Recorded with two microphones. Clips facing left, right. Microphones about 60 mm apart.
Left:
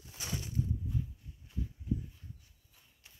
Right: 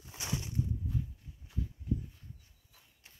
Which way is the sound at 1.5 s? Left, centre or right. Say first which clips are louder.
Right 1 dB; right.